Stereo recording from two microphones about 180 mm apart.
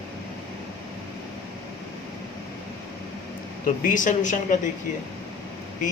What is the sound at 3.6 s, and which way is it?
Speech, 50° left (ahead or behind).